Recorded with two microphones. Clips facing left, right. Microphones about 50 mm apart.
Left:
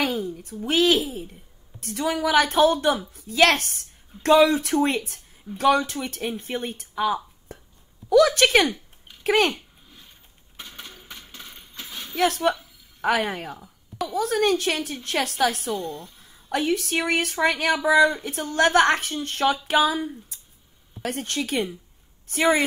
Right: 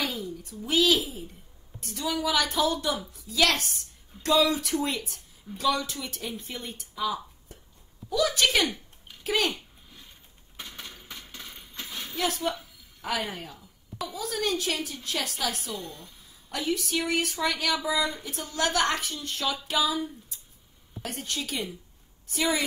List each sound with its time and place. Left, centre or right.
0.0 s speech: left
8.1 s speech: left
10.9 s a sound: centre
12.2 s speech: left